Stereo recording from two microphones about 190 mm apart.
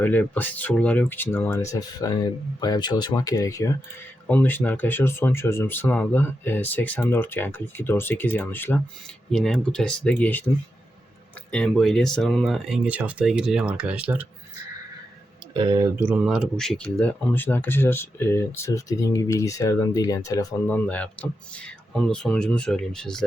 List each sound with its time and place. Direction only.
0.0 s speech: 10° left (ahead or behind)
11.5 s speech: centre (ahead or behind)
15.5 s speech: 20° right (ahead or behind); by 23.2 s 5° left (ahead or behind)